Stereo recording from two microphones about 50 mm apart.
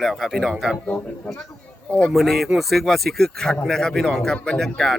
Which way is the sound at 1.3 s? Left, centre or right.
Left.